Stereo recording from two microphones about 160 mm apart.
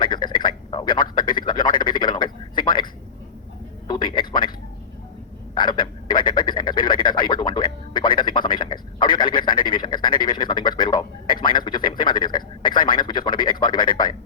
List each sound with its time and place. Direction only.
0.0 s a sound: 30° left (ahead or behind)
3.8 s frog: 30° left (ahead or behind)
5.5 s frog: 30° left (ahead or behind)